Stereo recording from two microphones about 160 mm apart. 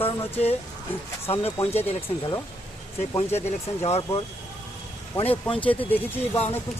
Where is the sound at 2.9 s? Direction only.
40° left (ahead or behind).